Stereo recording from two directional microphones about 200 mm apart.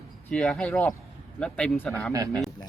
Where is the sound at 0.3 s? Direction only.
5° left (ahead or behind).